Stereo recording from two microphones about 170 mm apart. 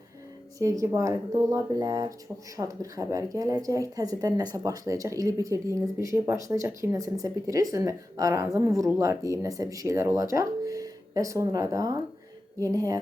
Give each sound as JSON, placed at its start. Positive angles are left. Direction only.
{"t": 0.6, "sound": "speech", "side_deg": -20}